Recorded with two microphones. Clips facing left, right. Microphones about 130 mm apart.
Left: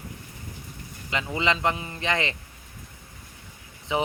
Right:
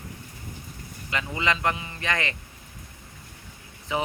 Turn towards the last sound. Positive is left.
turn(degrees=20)  # may be behind; listen again after turning